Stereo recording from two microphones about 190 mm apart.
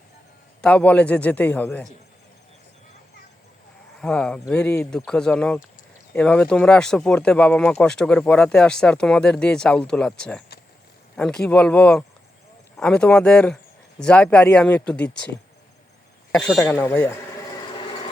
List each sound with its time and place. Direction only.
0.6 s speech: 5° left (ahead or behind)
4.0 s speech: 5° left (ahead or behind)
16.3 s speech: 5° left (ahead or behind)
17.7 s vehicle: 25° left (ahead or behind)